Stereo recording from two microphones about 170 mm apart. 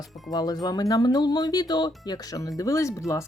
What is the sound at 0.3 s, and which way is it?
Speech, 20° left (ahead or behind).